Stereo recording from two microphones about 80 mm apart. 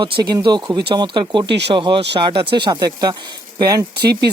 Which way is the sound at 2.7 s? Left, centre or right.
Right.